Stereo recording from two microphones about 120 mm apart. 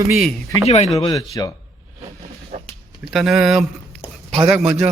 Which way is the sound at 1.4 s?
30° left (ahead or behind).